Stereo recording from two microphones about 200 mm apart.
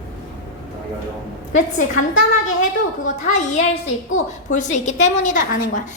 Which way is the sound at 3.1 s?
35° left (ahead or behind).